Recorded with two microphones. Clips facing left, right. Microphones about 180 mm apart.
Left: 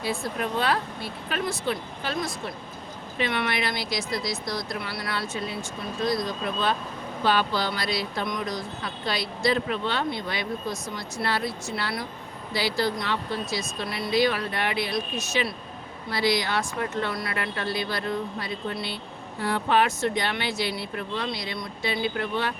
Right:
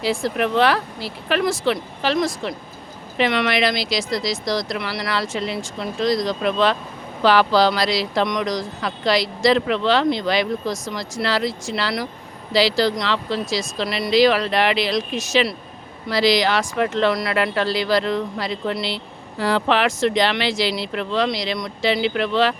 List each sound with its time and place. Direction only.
0.0 s speech: 90° right